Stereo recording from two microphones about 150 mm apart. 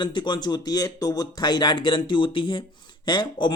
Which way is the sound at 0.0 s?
30° left (ahead or behind).